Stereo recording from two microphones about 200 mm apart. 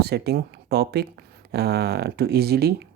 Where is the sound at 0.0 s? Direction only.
55° right (ahead or behind).